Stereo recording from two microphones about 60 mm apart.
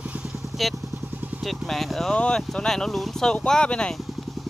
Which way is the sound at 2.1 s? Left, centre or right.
Centre.